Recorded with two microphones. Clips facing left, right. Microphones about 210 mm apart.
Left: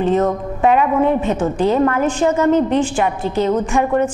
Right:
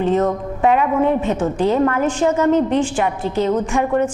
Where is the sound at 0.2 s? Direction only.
25° left (ahead or behind).